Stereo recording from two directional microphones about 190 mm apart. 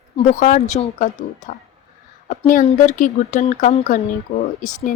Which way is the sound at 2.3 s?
45° left (ahead or behind).